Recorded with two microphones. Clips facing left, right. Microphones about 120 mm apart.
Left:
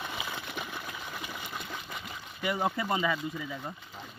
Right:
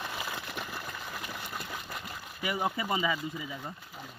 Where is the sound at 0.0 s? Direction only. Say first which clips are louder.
Even; centre (ahead or behind).